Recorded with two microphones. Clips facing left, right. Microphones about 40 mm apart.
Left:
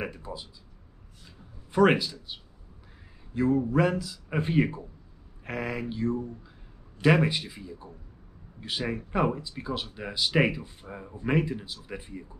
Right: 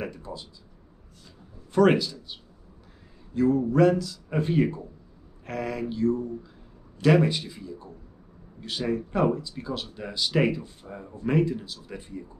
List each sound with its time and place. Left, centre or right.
0.0 s speech: centre
1.7 s a man's voice: centre